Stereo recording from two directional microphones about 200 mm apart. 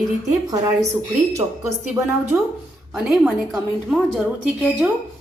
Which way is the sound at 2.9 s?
Centre (ahead or behind).